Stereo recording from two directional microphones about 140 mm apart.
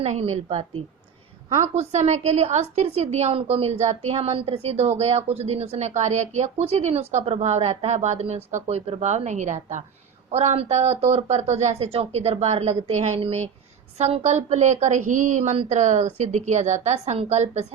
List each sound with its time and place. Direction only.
0.0 s a woman's voice: 50° right (ahead or behind)
10.3 s a woman's voice: 50° right (ahead or behind)